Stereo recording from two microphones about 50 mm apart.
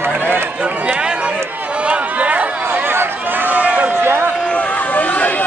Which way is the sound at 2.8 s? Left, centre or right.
Right.